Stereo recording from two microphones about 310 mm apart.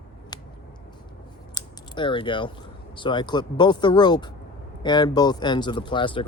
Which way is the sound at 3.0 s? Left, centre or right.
Centre.